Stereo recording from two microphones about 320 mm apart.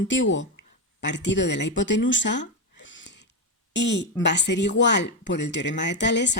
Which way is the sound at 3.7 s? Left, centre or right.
Left.